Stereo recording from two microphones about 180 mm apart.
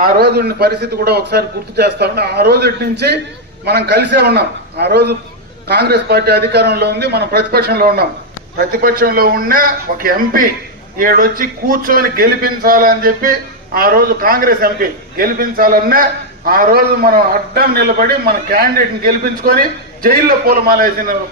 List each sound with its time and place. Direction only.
0.0 s a man's voice: 60° right (ahead or behind)